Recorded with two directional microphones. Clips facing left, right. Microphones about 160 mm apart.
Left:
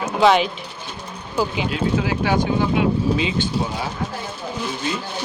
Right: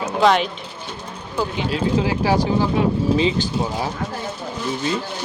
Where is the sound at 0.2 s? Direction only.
Centre (ahead or behind).